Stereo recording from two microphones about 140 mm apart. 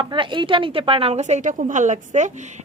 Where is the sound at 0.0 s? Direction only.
35° right (ahead or behind).